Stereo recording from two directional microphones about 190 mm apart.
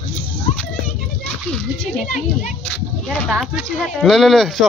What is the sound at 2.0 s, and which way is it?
Speech, 40° left (ahead or behind).